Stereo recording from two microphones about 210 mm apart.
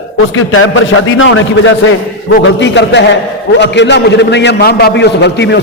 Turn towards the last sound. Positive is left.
turn(degrees=55)  # may be behind; listen again after turning